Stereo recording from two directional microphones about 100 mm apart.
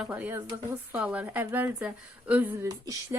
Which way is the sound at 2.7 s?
35° right (ahead or behind).